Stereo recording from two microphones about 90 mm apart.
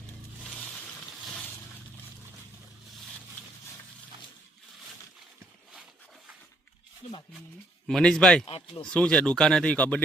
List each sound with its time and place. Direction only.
1.2 s a sound: 5° left (ahead or behind)
7.9 s speech: 5° left (ahead or behind)
8.4 s speech: 90° left
8.9 s speech: 10° left (ahead or behind)